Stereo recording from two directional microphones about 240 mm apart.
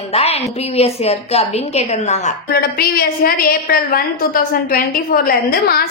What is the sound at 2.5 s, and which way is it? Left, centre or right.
A woman's voice, left.